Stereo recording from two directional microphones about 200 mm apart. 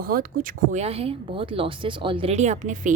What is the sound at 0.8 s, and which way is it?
Speech, 30° right (ahead or behind).